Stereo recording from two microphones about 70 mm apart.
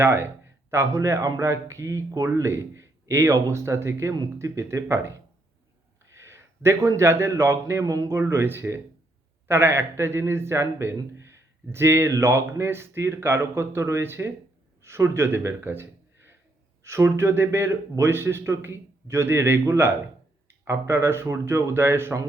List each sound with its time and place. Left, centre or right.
0.0 s a man's voice: right